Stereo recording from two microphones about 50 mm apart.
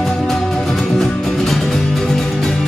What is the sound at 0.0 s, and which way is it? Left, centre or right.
Music, centre.